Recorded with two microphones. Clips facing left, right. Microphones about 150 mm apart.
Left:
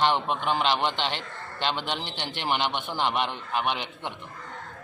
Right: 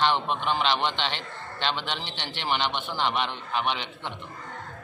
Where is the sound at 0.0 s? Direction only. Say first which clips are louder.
Left 1 dB; 10° left (ahead or behind).